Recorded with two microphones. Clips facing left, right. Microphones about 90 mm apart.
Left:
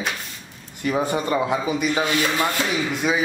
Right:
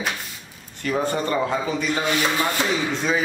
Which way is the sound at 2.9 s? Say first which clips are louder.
Left 1 dB; 10° left (ahead or behind).